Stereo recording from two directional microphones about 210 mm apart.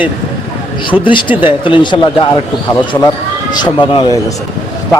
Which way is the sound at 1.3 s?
10° right (ahead or behind).